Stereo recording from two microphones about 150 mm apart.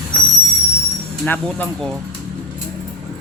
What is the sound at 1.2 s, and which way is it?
Speech, 10° left (ahead or behind).